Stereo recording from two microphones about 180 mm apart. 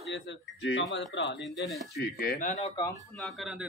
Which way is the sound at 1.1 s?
80° left.